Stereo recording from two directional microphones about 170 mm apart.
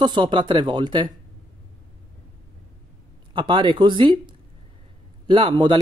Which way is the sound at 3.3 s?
30° right (ahead or behind).